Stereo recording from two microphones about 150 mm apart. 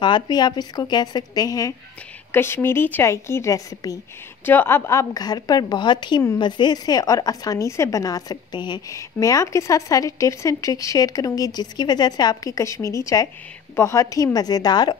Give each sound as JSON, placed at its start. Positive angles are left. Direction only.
{"t": 0.0, "sound": "a woman's voice", "side_deg": 30}